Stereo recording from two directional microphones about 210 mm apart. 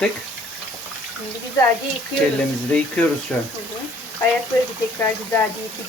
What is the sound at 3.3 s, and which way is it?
Speech, 5° left (ahead or behind).